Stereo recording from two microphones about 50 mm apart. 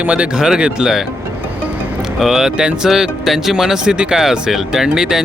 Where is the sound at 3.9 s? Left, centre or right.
Centre.